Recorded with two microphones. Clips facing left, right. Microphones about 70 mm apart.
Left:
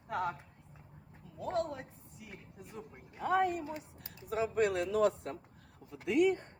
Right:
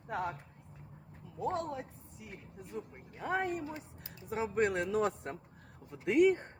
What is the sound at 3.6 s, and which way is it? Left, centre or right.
Speech, right.